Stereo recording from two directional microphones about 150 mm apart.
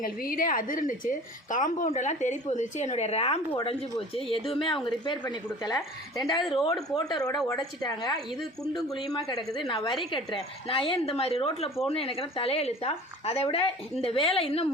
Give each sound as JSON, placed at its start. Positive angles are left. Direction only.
{"t": 0.0, "sound": "a woman's voice", "side_deg": 70}
{"t": 8.1, "sound": "speech", "side_deg": 0}
{"t": 9.0, "sound": "speech", "side_deg": 25}